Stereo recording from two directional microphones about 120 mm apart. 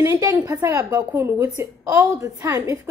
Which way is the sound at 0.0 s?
25° right (ahead or behind).